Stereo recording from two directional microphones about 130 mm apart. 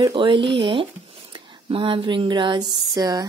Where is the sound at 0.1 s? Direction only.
40° right (ahead or behind).